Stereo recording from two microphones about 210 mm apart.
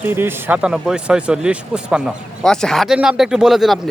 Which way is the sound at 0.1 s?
10° right (ahead or behind).